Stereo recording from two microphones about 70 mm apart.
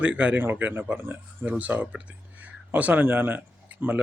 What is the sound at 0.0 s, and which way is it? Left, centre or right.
Speech, centre.